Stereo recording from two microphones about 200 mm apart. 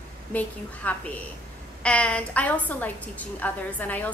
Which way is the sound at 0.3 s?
10° left (ahead or behind).